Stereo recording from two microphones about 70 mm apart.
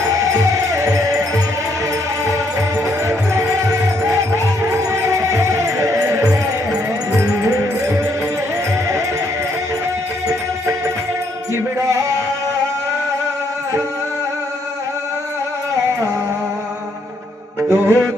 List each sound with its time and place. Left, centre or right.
0.0 s music: right
3.1 s music: right
10.2 s music: right
17.6 s music: right